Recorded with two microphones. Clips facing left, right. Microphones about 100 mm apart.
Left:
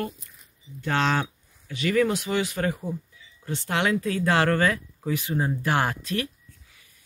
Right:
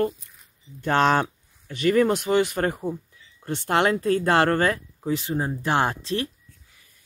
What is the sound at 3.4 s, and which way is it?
Speech, 55° right (ahead or behind).